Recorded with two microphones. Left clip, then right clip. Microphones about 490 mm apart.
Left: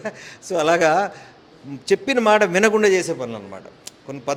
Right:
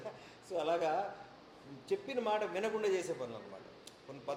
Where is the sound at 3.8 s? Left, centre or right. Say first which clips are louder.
Left 17 dB; left.